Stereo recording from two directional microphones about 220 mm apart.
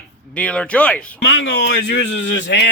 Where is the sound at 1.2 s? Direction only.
50° left (ahead or behind).